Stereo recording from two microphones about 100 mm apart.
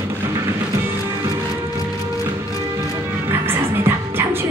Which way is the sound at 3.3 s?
20° right (ahead or behind).